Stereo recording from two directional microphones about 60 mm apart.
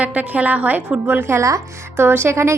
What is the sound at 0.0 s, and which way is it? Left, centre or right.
A woman's voice, right.